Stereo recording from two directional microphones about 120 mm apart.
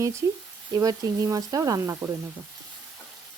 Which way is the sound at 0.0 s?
25° right (ahead or behind).